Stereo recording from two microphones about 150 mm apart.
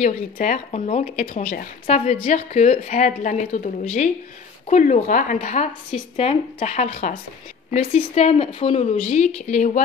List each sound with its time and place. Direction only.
0.7 s a woman's voice: 45° left (ahead or behind)